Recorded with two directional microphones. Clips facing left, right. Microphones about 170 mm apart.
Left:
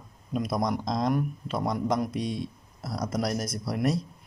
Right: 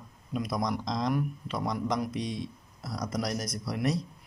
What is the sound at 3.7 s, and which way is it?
Speech, 55° left (ahead or behind).